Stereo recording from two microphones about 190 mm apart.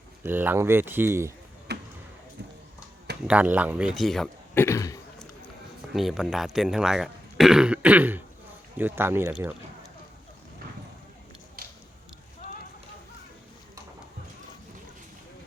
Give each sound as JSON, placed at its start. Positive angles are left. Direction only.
{"t": 0.2, "sound": "speech", "side_deg": -10}
{"t": 1.7, "sound": "basketball bounce", "side_deg": -60}
{"t": 3.2, "sound": "speech", "side_deg": -10}
{"t": 4.6, "sound": "a sound", "side_deg": 15}
{"t": 5.9, "sound": "speech", "side_deg": 0}
{"t": 11.6, "sound": "a sound", "side_deg": -50}